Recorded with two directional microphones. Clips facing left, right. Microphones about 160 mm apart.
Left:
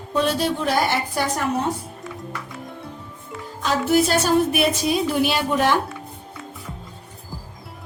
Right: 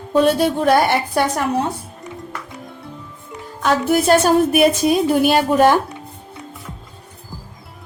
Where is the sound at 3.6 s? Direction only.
50° right (ahead or behind).